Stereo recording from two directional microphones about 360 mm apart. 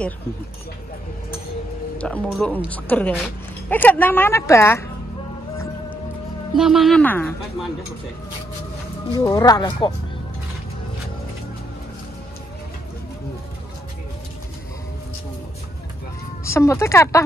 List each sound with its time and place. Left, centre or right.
2.0 s speech: centre
6.5 s speech: centre
9.1 s speech: centre
16.4 s speech: centre